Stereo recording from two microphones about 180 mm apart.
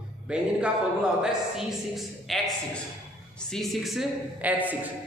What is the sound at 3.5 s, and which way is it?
Speech, centre (ahead or behind).